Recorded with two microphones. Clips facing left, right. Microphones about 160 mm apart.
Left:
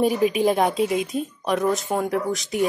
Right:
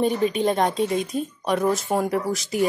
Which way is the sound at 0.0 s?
5° left (ahead or behind).